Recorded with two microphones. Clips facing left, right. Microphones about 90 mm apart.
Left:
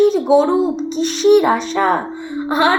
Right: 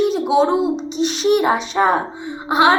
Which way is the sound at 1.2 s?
5° right (ahead or behind).